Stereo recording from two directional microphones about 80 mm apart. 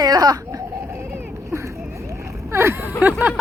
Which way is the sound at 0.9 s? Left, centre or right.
Right.